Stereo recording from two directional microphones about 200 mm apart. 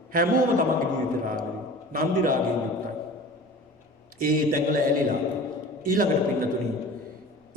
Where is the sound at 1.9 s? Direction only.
45° right (ahead or behind).